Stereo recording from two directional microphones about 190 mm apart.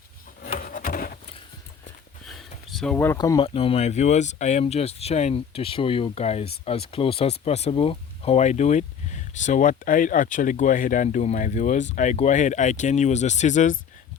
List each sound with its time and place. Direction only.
0.4 s wood: 50° left (ahead or behind)
2.2 s a sound: centre (ahead or behind)
3.2 s speech: 20° left (ahead or behind); by 13.7 s 40° left (ahead or behind)